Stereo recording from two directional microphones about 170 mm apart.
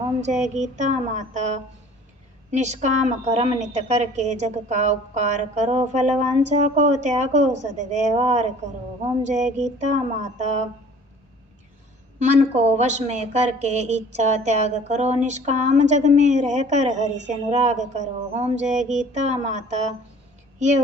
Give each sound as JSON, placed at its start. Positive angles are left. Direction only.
{"t": 0.2, "sound": "a woman's voice", "side_deg": -45}
{"t": 12.2, "sound": "a woman's voice", "side_deg": -40}
{"t": 20.6, "sound": "child singing", "side_deg": -45}